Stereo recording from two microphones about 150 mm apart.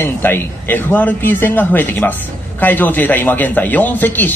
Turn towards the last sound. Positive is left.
turn(degrees=10)  # may be behind; listen again after turning